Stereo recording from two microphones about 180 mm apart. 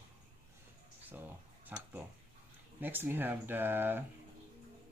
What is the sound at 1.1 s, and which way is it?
Speech, 10° right (ahead or behind).